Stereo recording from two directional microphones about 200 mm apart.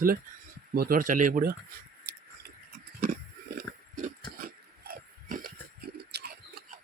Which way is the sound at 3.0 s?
45° right (ahead or behind).